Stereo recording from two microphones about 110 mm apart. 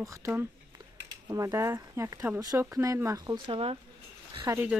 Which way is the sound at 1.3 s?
30° right (ahead or behind).